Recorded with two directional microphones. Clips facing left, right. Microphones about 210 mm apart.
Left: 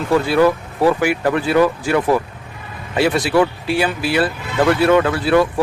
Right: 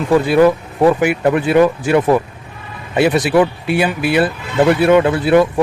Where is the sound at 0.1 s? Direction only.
15° right (ahead or behind).